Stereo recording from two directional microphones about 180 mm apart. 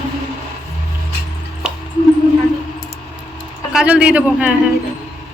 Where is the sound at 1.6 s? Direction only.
5° right (ahead or behind).